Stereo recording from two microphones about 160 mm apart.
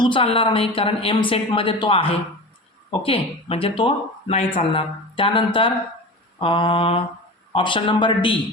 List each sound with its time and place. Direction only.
0.0 s speech: 35° left (ahead or behind)